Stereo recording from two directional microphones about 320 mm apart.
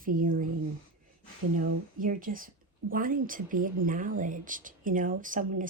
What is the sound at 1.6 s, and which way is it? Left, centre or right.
A woman's voice, right.